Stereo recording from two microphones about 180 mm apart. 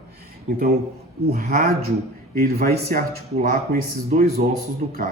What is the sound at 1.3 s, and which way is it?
A man's voice, 55° right (ahead or behind).